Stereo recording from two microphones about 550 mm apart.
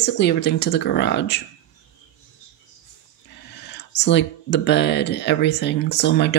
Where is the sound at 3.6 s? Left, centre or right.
Centre.